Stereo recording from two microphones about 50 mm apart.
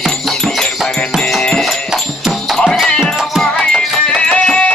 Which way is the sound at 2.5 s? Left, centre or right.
Centre.